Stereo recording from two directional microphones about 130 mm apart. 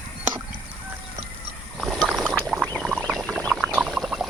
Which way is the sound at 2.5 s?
5° right (ahead or behind).